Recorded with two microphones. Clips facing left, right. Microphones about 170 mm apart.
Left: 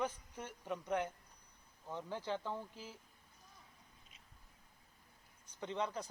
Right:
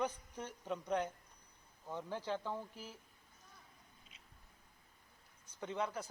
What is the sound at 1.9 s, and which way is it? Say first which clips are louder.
Speech: right 1 dB; 10° right (ahead or behind).